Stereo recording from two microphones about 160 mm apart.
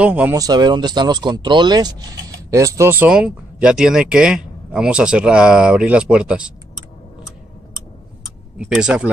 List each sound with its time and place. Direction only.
0.0 s speech: 10° right (ahead or behind)
0.4 s speech: 25° right (ahead or behind); by 6.5 s 5° right (ahead or behind)
8.5 s speech: 5° right (ahead or behind)